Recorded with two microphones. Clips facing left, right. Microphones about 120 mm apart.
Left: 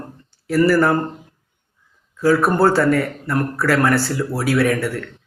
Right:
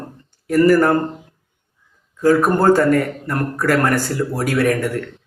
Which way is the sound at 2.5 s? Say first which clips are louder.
Right 2 dB; 45° right (ahead or behind).